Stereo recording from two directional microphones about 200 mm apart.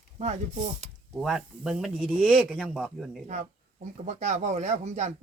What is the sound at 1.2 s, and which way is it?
Speech, centre (ahead or behind).